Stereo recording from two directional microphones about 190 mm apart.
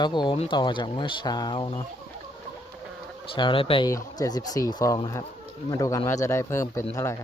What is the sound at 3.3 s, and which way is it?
Speech, 25° left (ahead or behind).